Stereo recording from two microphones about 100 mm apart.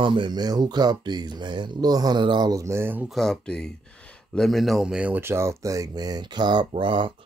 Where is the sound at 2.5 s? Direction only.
30° right (ahead or behind).